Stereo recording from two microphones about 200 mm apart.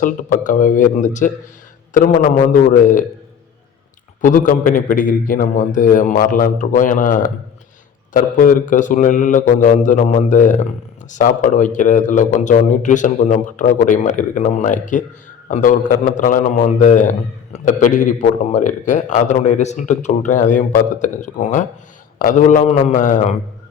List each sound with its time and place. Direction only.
0.0 s a man's voice: 40° left (ahead or behind)
4.2 s a man's voice: 40° left (ahead or behind)